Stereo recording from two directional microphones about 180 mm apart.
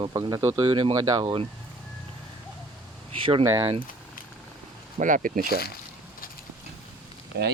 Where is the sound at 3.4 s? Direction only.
15° right (ahead or behind).